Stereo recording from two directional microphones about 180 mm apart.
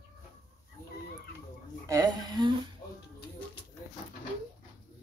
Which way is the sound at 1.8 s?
20° right (ahead or behind).